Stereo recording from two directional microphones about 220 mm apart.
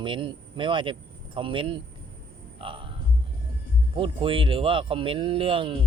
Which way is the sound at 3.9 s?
25° right (ahead or behind).